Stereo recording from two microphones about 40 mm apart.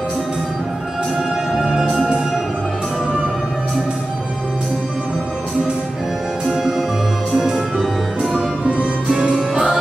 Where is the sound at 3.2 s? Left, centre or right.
Right; by 8.5 s centre.